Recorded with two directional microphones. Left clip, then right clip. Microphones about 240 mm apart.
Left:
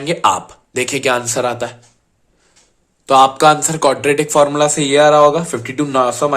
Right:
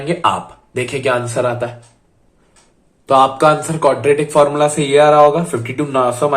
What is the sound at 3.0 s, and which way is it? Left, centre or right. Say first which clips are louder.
Speech: left 1 dB; left.